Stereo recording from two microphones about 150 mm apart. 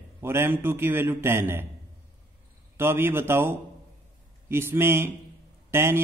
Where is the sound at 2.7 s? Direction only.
15° right (ahead or behind).